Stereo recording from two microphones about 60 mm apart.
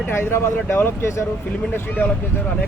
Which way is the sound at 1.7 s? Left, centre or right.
Left.